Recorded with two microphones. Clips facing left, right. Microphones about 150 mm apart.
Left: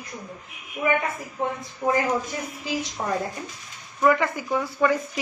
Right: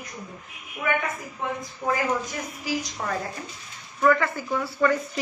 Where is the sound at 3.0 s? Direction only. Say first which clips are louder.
Left 6 dB; 25° left (ahead or behind).